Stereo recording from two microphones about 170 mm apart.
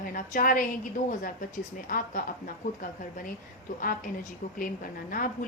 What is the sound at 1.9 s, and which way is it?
Speech, 55° left (ahead or behind).